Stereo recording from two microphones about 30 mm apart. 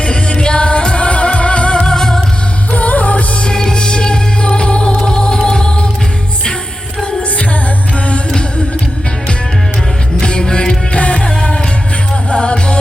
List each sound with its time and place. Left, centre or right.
0.0 s music: left
1.9 s music: left
2.7 s music: left
3.4 s music: left
10.2 s music: left